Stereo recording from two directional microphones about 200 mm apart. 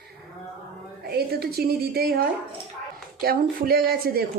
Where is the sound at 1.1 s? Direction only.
50° right (ahead or behind).